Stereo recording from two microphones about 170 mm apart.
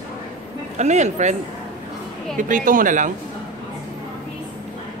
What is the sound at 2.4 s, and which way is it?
Speech, 50° right (ahead or behind).